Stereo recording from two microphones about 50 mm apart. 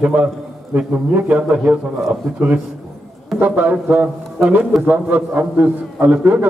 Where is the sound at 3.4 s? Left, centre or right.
Right.